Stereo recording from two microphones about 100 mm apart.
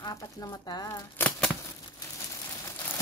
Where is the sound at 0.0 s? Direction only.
40° left (ahead or behind).